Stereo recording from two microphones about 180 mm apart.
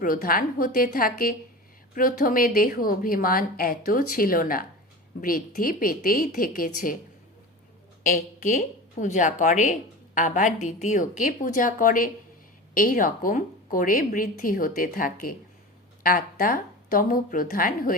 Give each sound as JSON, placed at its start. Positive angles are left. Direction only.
{"t": 0.0, "sound": "a woman's voice", "side_deg": 55}
{"t": 8.0, "sound": "a woman's voice", "side_deg": 45}